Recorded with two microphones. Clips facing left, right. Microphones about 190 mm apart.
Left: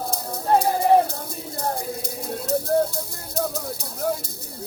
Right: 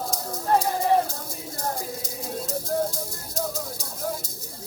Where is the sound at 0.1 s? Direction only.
60° left (ahead or behind).